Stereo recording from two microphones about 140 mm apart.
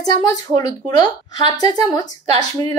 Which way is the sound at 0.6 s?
25° left (ahead or behind).